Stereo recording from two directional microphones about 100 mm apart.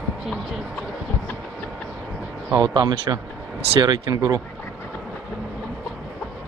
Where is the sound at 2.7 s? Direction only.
40° right (ahead or behind).